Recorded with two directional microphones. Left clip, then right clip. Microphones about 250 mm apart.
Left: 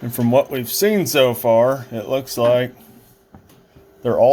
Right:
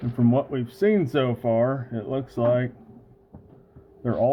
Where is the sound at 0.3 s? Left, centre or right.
Centre.